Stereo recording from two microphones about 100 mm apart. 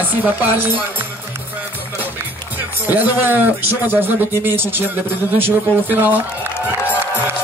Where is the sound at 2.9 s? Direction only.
20° right (ahead or behind).